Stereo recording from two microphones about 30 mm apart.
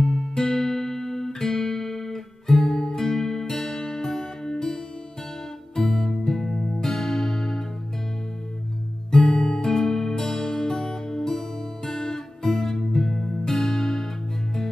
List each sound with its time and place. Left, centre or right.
0.0 s music: left
5.8 s music: centre
9.1 s music: left